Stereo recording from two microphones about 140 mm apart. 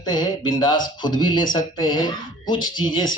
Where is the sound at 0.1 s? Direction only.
30° left (ahead or behind).